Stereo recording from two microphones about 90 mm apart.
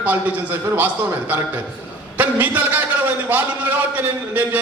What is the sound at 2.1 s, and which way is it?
A man's voice, 20° right (ahead or behind).